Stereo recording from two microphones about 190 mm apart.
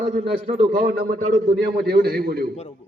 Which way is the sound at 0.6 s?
50° right (ahead or behind).